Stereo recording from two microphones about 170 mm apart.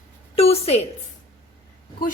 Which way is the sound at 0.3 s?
35° left (ahead or behind).